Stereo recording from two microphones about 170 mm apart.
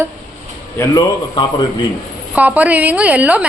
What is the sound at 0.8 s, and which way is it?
Speech, 25° left (ahead or behind).